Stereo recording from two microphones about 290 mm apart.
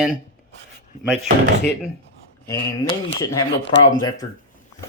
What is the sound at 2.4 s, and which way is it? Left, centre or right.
Speech, centre.